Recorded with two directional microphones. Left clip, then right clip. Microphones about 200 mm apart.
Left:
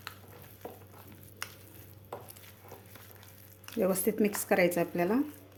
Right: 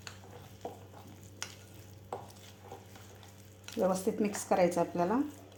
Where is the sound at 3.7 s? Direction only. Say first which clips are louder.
Left 2 dB; 25° left (ahead or behind).